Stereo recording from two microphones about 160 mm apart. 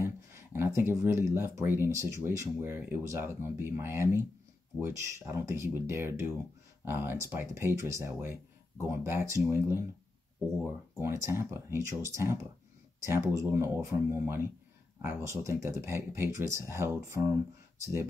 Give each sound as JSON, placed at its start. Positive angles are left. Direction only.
{"t": 0.0, "sound": "speech", "side_deg": -15}
{"t": 11.0, "sound": "speech", "side_deg": -15}